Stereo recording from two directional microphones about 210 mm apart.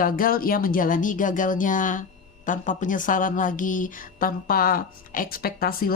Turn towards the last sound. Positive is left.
turn(degrees=45)  # may be behind; listen again after turning